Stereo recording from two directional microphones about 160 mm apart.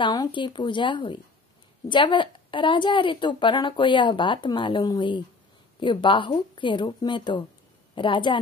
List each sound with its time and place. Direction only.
0.0 s a woman's voice: 25° left (ahead or behind)